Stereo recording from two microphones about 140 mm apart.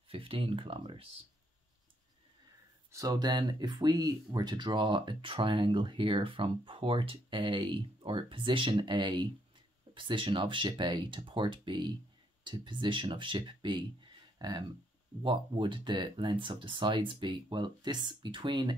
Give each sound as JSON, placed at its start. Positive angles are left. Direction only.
{"t": 0.1, "sound": "speech", "side_deg": -40}
{"t": 2.9, "sound": "speech", "side_deg": -25}